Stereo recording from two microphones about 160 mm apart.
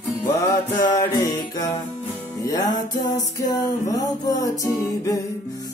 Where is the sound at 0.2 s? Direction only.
20° left (ahead or behind).